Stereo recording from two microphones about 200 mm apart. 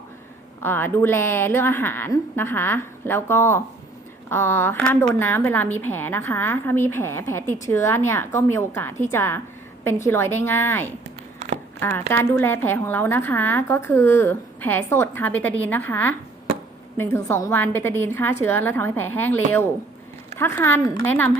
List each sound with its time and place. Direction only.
0.6 s a woman's voice: 10° left (ahead or behind)
11.3 s a sound: 35° right (ahead or behind)
11.8 s a woman's voice: 10° left (ahead or behind)